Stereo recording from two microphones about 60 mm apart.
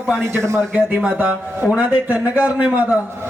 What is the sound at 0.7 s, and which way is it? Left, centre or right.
A man's voice, centre.